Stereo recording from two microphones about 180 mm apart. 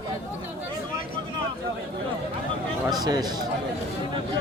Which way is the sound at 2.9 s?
20° right (ahead or behind).